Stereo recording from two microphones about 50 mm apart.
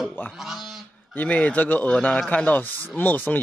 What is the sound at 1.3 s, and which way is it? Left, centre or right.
Speech, left.